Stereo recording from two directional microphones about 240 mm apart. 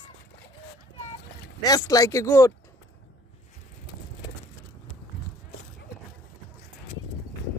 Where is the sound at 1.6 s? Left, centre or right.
Centre.